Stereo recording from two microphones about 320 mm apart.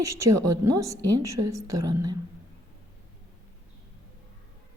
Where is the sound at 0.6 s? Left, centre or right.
Centre.